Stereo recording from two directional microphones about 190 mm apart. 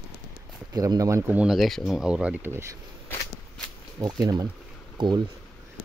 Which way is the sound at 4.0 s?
20° right (ahead or behind).